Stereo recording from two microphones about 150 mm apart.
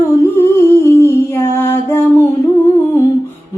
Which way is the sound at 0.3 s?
15° left (ahead or behind).